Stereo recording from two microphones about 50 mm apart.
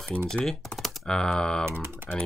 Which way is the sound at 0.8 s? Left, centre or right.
Centre.